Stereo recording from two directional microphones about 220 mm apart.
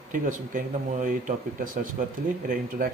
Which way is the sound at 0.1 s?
35° right (ahead or behind).